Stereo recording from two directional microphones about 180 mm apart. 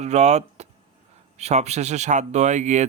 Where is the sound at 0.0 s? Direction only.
40° right (ahead or behind).